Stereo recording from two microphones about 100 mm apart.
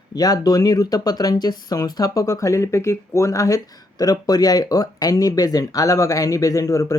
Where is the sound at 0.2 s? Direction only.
40° left (ahead or behind).